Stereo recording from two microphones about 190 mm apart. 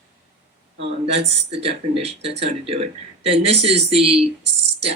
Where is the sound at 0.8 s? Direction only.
30° right (ahead or behind).